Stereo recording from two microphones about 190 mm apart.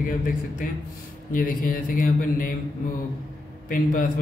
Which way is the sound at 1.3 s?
45° left (ahead or behind).